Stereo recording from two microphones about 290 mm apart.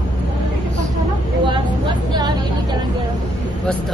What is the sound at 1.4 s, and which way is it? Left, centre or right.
Vehicle, centre.